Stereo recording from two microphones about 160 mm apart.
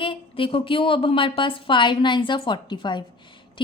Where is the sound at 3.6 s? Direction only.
30° left (ahead or behind).